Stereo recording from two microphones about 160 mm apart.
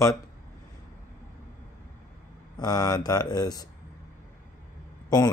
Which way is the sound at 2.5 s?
25° left (ahead or behind).